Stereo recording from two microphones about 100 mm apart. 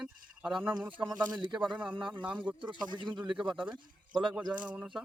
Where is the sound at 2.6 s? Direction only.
50° right (ahead or behind).